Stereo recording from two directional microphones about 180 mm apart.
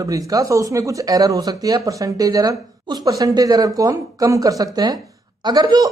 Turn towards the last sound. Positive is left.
turn(degrees=-20)  # may be behind; listen again after turning